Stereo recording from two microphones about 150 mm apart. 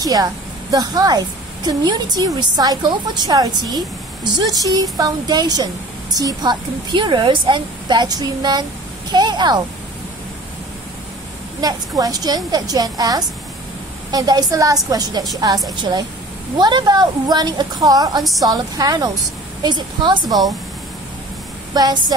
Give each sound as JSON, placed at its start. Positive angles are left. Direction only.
{"t": 0.0, "sound": "a woman's voice", "side_deg": -25}
{"t": 11.6, "sound": "a woman's voice", "side_deg": -25}
{"t": 21.7, "sound": "a woman's voice", "side_deg": -25}